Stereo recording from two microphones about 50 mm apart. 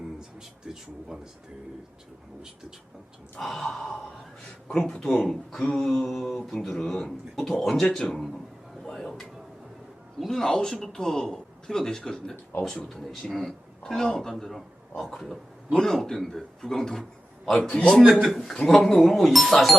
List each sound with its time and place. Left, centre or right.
0.7 s speech: centre
3.4 s a man's voice: centre
5.1 s a man's voice: centre
17.7 s a man's voice: left
18.0 s speech: centre